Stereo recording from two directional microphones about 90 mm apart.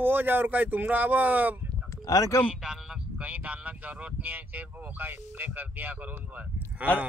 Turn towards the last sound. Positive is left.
turn(degrees=-20)  # may be behind; listen again after turning